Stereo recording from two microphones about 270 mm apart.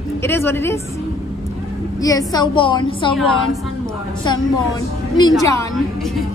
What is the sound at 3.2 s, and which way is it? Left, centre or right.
Speech, centre.